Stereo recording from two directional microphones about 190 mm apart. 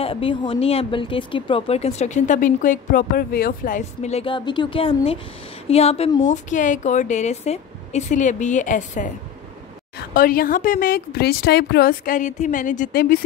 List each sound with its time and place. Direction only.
0.0 s a woman's voice: 30° left (ahead or behind); by 13.2 s 50° left (ahead or behind)